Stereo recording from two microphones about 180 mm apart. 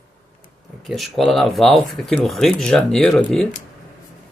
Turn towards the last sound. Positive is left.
turn(degrees=0)  # may be behind; listen again after turning